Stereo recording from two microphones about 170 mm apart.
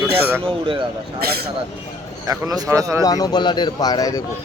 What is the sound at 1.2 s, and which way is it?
Speech, 65° right (ahead or behind).